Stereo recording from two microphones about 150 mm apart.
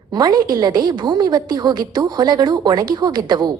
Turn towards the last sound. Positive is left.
turn(degrees=-30)  # may be behind; listen again after turning